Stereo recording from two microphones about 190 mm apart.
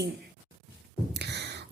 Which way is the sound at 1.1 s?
65° right (ahead or behind).